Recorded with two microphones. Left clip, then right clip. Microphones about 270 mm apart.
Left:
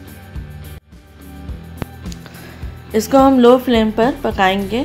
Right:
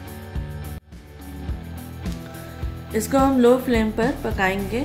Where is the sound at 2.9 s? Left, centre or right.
Left.